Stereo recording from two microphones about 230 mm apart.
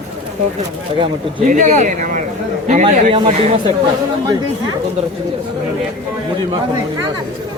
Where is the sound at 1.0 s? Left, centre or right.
Right.